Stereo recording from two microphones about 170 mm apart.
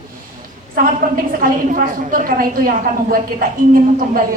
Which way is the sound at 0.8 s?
55° right (ahead or behind).